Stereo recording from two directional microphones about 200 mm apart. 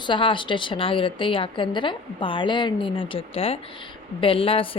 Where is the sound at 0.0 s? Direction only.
25° left (ahead or behind).